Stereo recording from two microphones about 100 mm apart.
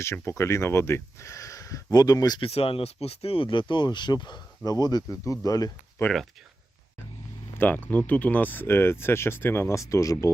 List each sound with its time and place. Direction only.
0.0 s speech: 25° left (ahead or behind)
2.4 s speech: 80° left; by 5.7 s 40° left (ahead or behind)
6.1 s speech: 15° left (ahead or behind)
7.6 s speech: 15° left (ahead or behind); by 10.3 s 30° left (ahead or behind)